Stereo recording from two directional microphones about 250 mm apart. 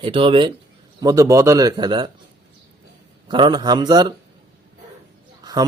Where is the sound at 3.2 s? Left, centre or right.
Centre.